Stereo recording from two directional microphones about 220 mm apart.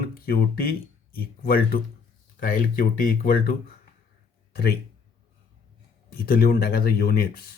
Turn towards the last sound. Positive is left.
turn(degrees=45)  # may be behind; listen again after turning